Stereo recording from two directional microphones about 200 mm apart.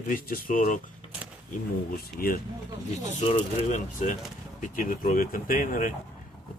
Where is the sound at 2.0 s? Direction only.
50° left (ahead or behind).